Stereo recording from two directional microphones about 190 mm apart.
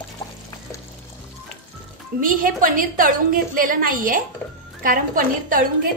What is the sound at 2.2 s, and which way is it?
A woman's voice, 45° right (ahead or behind).